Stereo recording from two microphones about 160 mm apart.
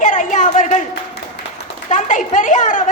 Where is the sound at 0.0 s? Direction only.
50° left (ahead or behind).